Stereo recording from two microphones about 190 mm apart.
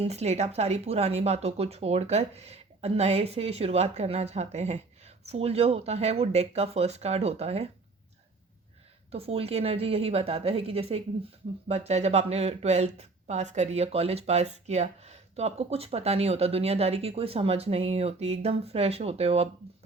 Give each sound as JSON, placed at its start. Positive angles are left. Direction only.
{"t": 0.0, "sound": "speech", "side_deg": -35}
{"t": 9.1, "sound": "speech", "side_deg": -30}